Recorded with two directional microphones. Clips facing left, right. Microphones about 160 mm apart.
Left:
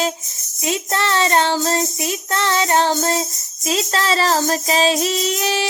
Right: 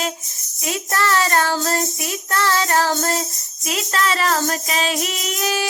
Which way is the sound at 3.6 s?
30° left (ahead or behind).